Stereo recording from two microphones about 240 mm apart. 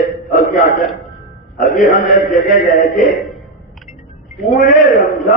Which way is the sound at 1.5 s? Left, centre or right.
Left.